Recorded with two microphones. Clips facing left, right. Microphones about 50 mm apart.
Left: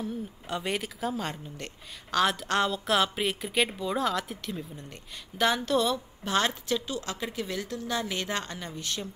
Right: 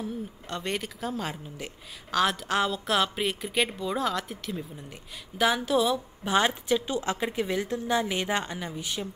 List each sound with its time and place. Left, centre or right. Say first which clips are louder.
0.0 s speech: even; centre